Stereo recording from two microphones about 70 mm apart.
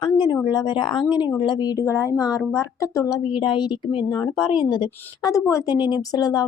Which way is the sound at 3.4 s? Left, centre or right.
Left.